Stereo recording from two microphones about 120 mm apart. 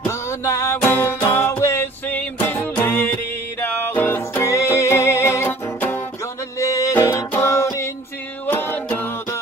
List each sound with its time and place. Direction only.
0.0 s music: 25° left (ahead or behind)